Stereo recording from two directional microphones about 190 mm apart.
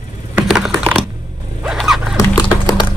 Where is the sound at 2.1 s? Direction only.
20° left (ahead or behind).